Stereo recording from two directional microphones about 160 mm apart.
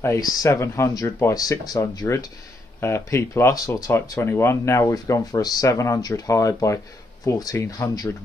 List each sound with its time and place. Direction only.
0.0 s speech: 20° left (ahead or behind)